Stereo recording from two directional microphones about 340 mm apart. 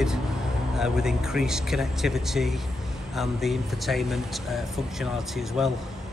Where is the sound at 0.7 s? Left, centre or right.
Centre.